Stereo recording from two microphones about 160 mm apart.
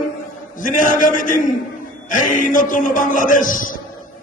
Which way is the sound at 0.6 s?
55° left (ahead or behind).